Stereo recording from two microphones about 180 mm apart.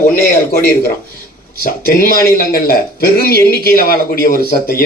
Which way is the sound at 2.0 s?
55° left (ahead or behind).